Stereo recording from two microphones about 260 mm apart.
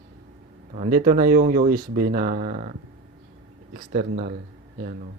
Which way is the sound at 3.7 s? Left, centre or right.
Right.